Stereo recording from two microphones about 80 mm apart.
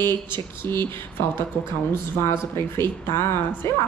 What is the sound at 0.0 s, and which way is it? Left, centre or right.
A woman's voice, left.